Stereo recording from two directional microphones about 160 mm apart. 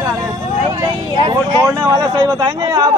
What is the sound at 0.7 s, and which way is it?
Speech, 20° right (ahead or behind).